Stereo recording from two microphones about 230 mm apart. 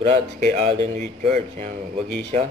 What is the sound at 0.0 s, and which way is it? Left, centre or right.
Speech, right.